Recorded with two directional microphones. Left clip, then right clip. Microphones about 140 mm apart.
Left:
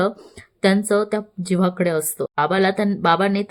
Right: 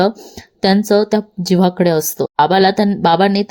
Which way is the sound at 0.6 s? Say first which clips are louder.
Right 5 dB; 25° right (ahead or behind).